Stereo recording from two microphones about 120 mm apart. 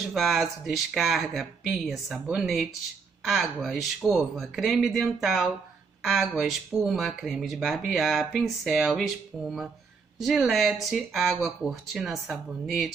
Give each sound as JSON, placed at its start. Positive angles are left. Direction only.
{"t": 0.1, "sound": "speech", "side_deg": 0}